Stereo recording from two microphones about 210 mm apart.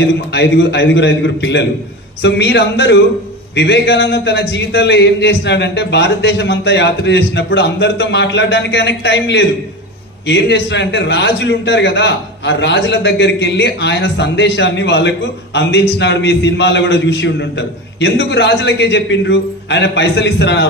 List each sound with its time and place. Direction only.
0.0 s a man's voice: 55° left (ahead or behind)